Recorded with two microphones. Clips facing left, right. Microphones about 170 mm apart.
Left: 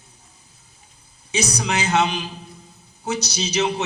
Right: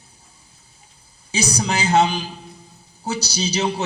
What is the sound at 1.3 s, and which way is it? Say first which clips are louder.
A man's voice: right 1 dB; 30° right (ahead or behind).